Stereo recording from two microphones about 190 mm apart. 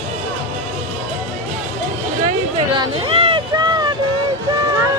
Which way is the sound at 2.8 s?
30° right (ahead or behind).